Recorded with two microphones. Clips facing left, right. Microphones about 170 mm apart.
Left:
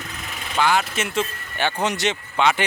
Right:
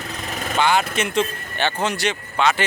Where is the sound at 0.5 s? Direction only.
Centre (ahead or behind).